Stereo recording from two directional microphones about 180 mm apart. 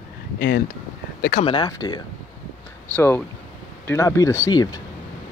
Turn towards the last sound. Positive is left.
turn(degrees=15)  # may be behind; listen again after turning